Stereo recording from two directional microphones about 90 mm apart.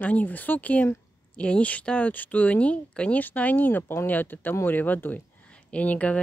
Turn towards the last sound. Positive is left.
turn(degrees=15)  # may be behind; listen again after turning